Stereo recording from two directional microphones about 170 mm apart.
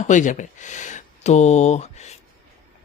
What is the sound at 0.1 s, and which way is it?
Speech, 50° left (ahead or behind).